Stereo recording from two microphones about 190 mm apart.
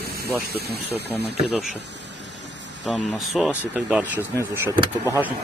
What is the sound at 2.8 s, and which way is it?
Speech, centre (ahead or behind).